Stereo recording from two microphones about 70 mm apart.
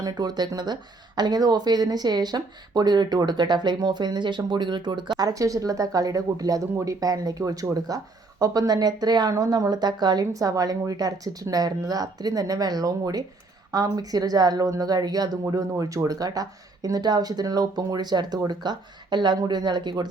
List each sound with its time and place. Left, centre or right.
0.0 s speech: right
15.4 s speech: right
16.0 s speech: right